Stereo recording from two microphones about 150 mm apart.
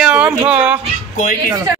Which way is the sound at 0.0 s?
5° right (ahead or behind).